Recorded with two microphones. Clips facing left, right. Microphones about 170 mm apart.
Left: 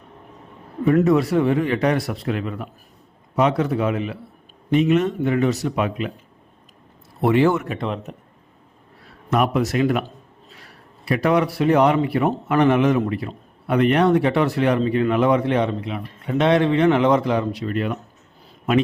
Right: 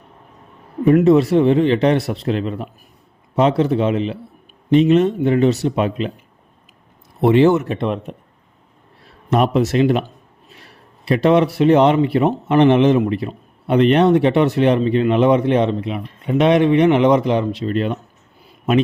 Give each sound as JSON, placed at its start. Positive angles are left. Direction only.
{"t": 0.9, "sound": "a man's voice", "side_deg": -25}
{"t": 7.2, "sound": "a man's voice", "side_deg": -25}
{"t": 9.3, "sound": "a man's voice", "side_deg": -30}